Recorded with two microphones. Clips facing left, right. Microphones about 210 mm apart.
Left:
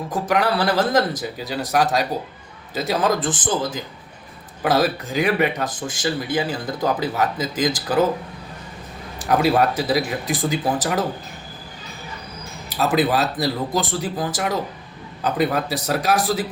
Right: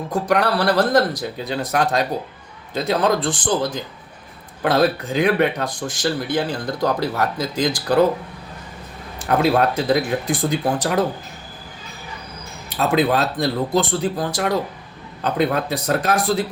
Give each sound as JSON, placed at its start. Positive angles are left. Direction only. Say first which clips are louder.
{"t": 0.1, "sound": "speech", "louder": "right 2 dB", "side_deg": 5}
{"t": 9.1, "sound": "speech", "louder": "even", "side_deg": 5}
{"t": 12.8, "sound": "speech", "louder": "right 1 dB", "side_deg": 0}